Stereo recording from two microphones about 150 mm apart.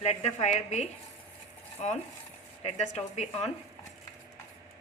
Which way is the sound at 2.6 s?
50° left (ahead or behind).